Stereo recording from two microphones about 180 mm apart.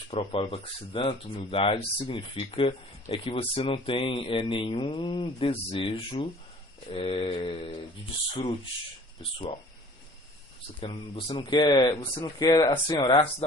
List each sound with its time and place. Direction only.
0.1 s speech: 30° left (ahead or behind)
10.8 s speech: 30° left (ahead or behind)